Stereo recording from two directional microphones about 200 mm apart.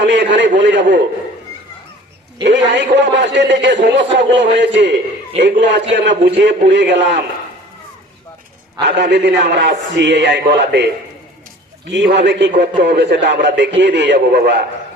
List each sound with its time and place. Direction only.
0.0 s a sound: 60° right (ahead or behind)
0.6 s a man's voice: 60° right (ahead or behind)
2.4 s a man's voice: 60° right (ahead or behind)
8.8 s a man's voice: 60° right (ahead or behind)
11.9 s a man's voice: 60° right (ahead or behind)